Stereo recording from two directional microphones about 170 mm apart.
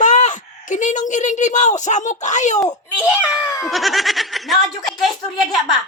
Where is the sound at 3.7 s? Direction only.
Centre (ahead or behind).